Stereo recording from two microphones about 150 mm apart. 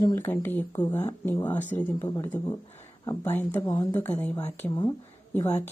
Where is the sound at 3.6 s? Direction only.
25° left (ahead or behind).